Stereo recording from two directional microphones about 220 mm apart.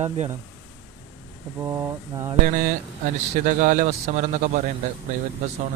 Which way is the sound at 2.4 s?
40° right (ahead or behind).